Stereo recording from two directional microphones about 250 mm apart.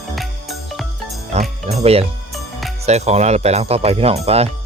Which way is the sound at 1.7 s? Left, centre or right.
Right.